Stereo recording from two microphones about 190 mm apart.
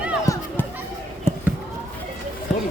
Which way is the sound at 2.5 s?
Centre (ahead or behind).